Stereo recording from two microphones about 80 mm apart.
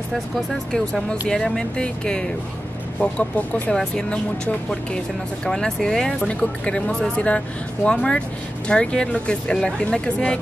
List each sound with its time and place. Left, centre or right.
1.2 s speech: centre